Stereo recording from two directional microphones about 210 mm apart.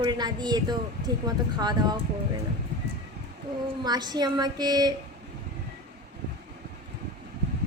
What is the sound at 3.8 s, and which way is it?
A woman's voice, 20° right (ahead or behind).